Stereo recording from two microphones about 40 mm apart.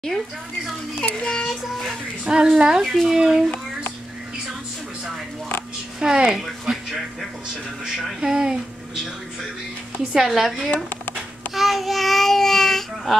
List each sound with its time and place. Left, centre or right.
0.1 s speech: left
1.3 s child singing: centre
2.2 s speech: centre
2.8 s a child's voice: centre
5.9 s speech: centre
6.3 s a sound: centre
7.8 s speech: centre
10.1 s a child's voice: centre